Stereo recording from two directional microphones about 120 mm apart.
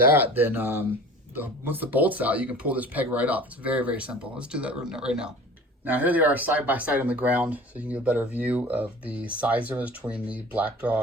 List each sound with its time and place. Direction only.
0.1 s speech: 15° right (ahead or behind)